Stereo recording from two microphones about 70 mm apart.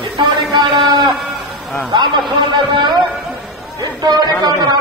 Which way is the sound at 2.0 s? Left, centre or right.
Right.